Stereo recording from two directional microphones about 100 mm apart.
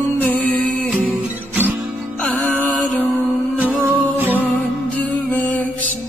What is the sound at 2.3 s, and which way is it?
Music, 15° left (ahead or behind).